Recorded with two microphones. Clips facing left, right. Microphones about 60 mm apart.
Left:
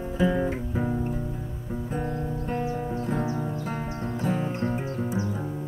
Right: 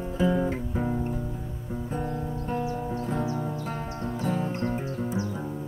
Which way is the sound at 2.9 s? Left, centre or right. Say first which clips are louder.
Left 1 dB; centre.